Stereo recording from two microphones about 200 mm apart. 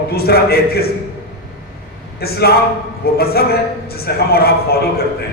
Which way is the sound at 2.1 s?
50° left (ahead or behind).